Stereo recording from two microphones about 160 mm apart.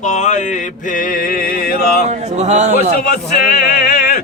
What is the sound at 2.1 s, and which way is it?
Speech, 45° right (ahead or behind).